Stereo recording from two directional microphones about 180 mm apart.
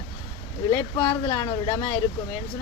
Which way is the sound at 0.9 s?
20° left (ahead or behind).